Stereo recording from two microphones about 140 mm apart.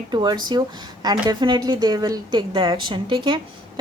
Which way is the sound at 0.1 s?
30° right (ahead or behind).